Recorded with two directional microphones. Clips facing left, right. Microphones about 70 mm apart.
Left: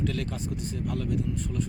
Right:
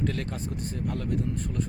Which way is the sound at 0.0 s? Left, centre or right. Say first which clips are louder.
Even; right.